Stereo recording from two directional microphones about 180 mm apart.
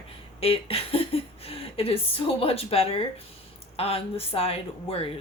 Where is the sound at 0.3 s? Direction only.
35° left (ahead or behind).